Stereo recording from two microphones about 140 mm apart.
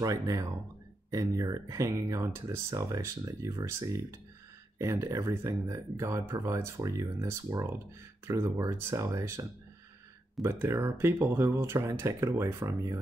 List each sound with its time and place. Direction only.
0.0 s speech: 25° right (ahead or behind)
10.4 s speech: 15° right (ahead or behind)